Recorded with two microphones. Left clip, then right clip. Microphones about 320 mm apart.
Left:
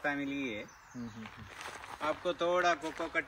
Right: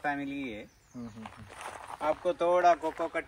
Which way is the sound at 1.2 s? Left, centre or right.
Centre.